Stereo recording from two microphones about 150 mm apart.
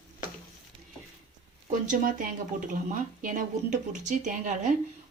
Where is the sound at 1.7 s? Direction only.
60° right (ahead or behind).